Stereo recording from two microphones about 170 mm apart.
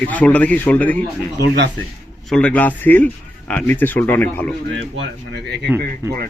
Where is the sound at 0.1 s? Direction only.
10° left (ahead or behind).